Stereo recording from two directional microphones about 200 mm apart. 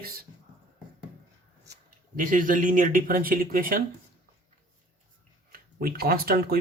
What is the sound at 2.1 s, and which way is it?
Speech, 45° right (ahead or behind).